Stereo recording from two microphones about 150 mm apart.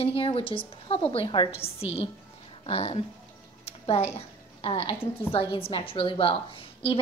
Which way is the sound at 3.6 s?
40° left (ahead or behind).